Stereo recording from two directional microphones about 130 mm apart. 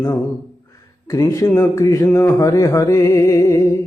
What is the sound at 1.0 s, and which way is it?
Music, 25° left (ahead or behind).